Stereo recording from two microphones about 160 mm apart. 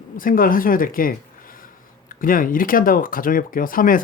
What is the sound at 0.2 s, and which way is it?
Speech, 60° left (ahead or behind).